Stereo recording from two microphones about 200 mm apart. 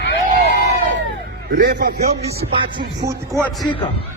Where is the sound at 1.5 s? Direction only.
55° right (ahead or behind).